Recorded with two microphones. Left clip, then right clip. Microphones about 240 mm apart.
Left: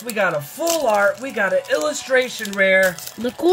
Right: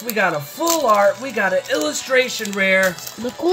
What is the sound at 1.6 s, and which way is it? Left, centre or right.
Speech, centre.